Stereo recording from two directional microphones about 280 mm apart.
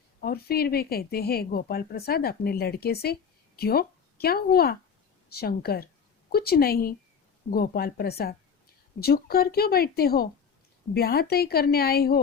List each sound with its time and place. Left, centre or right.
0.2 s speech: left